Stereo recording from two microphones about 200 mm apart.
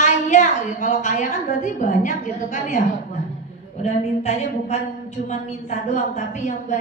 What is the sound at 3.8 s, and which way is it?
A woman's voice, 35° left (ahead or behind).